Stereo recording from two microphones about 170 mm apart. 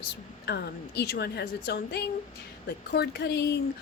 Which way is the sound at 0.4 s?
75° left (ahead or behind).